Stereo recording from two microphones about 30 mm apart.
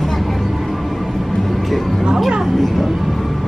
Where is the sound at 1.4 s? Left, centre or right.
Centre.